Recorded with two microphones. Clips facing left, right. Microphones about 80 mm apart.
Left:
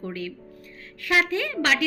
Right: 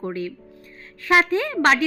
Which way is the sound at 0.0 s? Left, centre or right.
Right.